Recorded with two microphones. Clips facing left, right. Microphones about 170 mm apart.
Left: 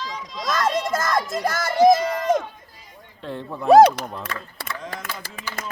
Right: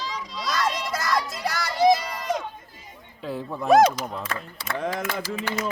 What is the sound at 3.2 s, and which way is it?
Speech, 5° right (ahead or behind).